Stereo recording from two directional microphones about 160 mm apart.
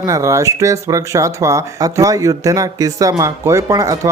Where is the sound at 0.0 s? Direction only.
20° right (ahead or behind).